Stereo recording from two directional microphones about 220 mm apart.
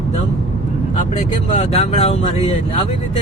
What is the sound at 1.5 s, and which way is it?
Speech, 30° left (ahead or behind).